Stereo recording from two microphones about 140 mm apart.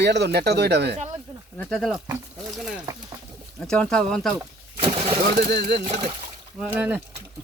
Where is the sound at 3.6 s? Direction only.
5° left (ahead or behind).